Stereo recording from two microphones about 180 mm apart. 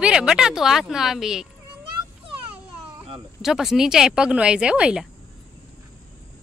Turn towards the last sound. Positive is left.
turn(degrees=-5)  # may be behind; listen again after turning